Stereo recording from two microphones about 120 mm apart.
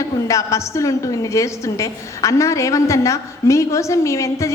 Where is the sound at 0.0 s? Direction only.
25° left (ahead or behind).